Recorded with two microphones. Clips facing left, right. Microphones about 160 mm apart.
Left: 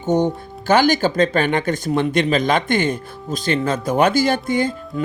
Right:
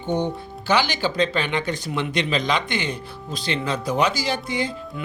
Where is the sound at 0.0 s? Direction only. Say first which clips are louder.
Left 6 dB; 45° left (ahead or behind).